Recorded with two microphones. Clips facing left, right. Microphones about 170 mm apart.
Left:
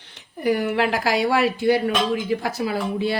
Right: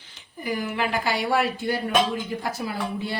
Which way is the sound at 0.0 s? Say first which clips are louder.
Left 10 dB; 70° left (ahead or behind).